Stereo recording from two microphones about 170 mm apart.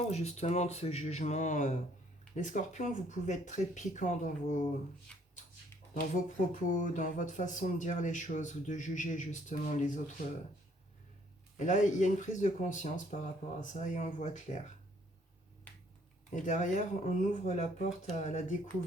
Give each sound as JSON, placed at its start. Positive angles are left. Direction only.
{"t": 0.0, "sound": "speech", "side_deg": 40}
{"t": 6.5, "sound": "speech", "side_deg": 50}
{"t": 11.5, "sound": "speech", "side_deg": 45}
{"t": 16.3, "sound": "speech", "side_deg": 45}